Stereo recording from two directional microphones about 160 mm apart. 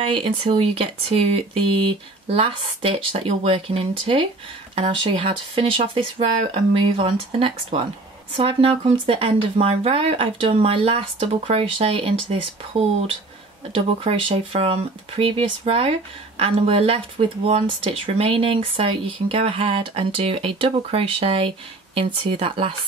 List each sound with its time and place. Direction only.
0.0 s speech: 35° right (ahead or behind)